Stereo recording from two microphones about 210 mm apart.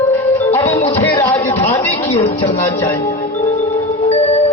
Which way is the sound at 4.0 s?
30° left (ahead or behind).